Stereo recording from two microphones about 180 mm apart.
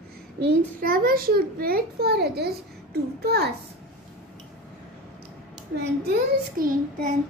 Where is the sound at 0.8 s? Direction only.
55° right (ahead or behind).